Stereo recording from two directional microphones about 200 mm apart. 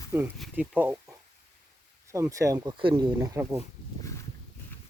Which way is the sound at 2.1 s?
15° right (ahead or behind).